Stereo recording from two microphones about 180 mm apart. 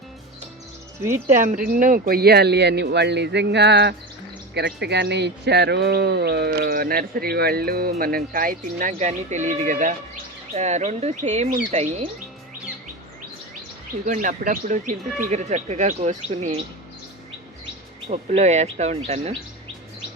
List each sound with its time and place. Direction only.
1.3 s speech: 45° right (ahead or behind)
14.0 s speech: 45° right (ahead or behind)
18.1 s speech: 40° right (ahead or behind)